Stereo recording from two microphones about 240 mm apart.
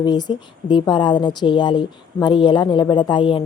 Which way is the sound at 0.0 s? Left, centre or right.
Centre.